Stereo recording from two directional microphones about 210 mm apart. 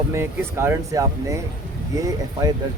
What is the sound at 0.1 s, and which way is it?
Speech, 10° right (ahead or behind).